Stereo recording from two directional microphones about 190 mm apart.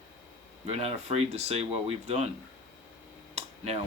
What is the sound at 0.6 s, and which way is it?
Speech, 35° right (ahead or behind).